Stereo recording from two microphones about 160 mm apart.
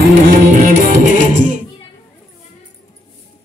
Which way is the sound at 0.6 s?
55° right (ahead or behind).